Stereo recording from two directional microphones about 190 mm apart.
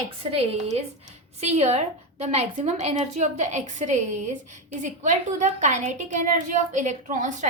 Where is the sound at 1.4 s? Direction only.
35° right (ahead or behind).